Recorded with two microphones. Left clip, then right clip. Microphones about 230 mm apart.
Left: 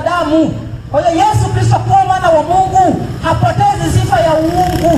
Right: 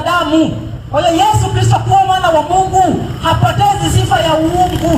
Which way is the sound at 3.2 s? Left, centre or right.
Right.